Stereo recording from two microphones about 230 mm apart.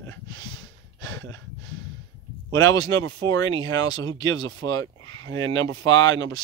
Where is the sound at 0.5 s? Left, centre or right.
Right.